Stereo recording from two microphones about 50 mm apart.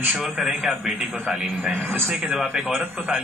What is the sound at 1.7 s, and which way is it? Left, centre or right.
Speech, right.